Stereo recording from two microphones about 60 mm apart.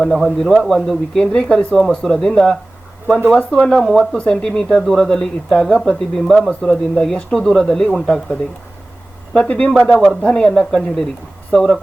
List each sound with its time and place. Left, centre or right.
0.0 s speech: centre
3.8 s speech: centre
4.2 s speech: centre